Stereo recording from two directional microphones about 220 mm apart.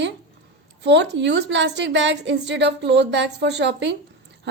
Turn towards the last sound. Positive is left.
turn(degrees=-50)  # may be behind; listen again after turning